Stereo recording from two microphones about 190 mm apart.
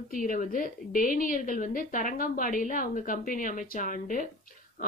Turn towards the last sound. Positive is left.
turn(degrees=45)  # may be behind; listen again after turning